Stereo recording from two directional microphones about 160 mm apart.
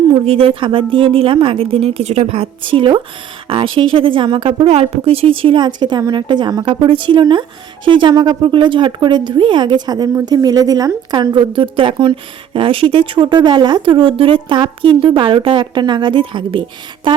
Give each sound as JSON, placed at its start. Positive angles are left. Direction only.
{"t": 0.1, "sound": "a woman's voice", "side_deg": -35}